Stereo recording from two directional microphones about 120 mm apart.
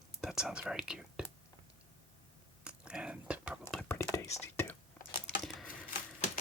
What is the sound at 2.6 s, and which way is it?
Whispering, 10° right (ahead or behind).